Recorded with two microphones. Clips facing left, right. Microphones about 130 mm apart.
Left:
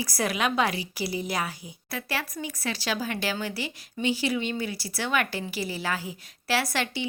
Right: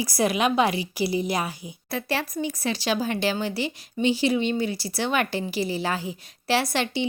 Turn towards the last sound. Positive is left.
turn(degrees=-20)  # may be behind; listen again after turning